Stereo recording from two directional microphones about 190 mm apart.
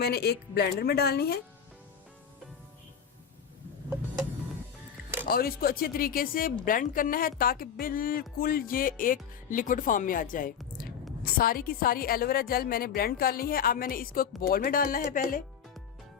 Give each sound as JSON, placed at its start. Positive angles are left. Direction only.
{"t": 0.0, "sound": "speech", "side_deg": 55}
{"t": 5.3, "sound": "a woman's voice", "side_deg": 50}